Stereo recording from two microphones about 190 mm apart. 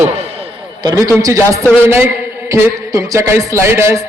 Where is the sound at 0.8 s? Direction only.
15° right (ahead or behind).